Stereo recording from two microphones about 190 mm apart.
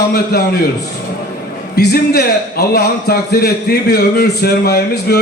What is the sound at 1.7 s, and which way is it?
A man's voice, 55° left (ahead or behind).